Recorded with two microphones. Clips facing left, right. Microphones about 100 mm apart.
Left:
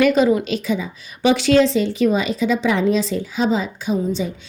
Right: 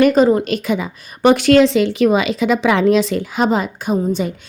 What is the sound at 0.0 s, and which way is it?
A woman's voice, 45° right (ahead or behind).